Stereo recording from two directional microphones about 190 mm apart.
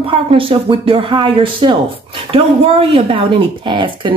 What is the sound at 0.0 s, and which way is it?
A woman's voice, 30° right (ahead or behind).